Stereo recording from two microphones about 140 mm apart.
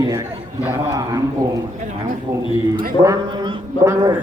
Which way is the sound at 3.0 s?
25° right (ahead or behind).